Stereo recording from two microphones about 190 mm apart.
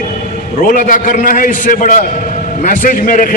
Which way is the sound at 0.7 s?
45° left (ahead or behind).